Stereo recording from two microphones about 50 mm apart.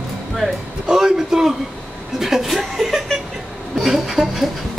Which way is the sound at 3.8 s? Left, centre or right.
Centre.